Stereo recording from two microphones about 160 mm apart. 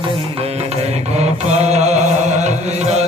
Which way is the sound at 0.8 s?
40° right (ahead or behind).